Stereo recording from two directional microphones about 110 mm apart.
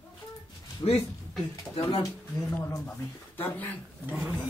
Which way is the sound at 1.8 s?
55° left (ahead or behind).